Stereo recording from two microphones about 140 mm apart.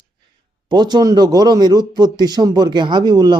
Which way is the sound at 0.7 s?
30° right (ahead or behind).